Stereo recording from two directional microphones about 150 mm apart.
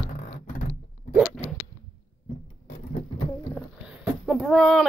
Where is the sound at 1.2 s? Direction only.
5° left (ahead or behind).